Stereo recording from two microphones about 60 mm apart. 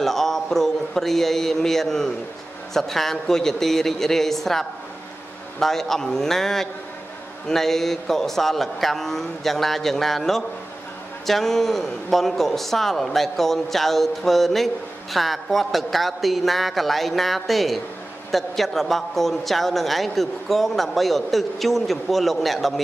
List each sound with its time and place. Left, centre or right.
0.0 s speech: centre